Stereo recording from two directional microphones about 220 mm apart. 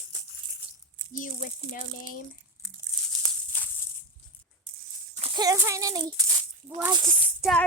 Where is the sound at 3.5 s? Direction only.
10° left (ahead or behind).